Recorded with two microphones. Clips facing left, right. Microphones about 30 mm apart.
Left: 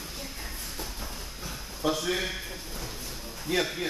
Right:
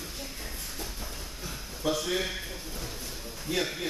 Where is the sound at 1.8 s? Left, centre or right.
Centre.